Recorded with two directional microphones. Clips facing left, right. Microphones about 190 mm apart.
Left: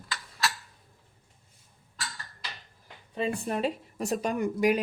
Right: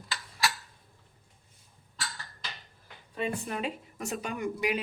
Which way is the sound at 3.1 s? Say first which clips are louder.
Left 3 dB; 35° left (ahead or behind).